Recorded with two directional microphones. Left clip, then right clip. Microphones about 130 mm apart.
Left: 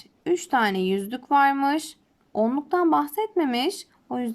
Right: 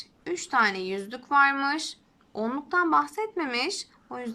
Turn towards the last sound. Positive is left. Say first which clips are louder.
# left 5 dB
turn(degrees=60)  # may be behind; listen again after turning